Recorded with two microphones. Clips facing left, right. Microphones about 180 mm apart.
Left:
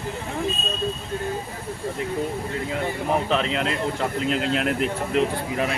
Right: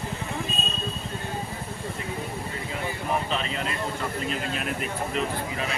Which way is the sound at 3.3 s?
70° left (ahead or behind).